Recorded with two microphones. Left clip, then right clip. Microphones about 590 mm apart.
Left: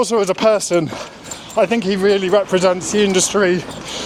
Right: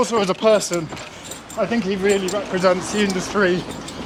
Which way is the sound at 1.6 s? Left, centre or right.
Centre.